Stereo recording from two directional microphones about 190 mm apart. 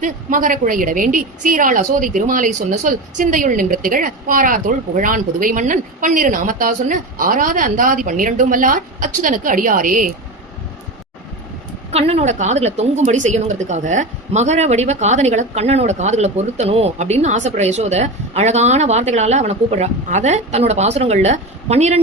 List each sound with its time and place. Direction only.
0.0 s a woman's voice: 45° right (ahead or behind)
11.9 s a woman's voice: 35° right (ahead or behind)